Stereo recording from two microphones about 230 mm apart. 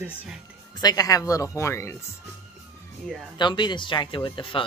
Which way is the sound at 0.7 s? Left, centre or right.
Centre.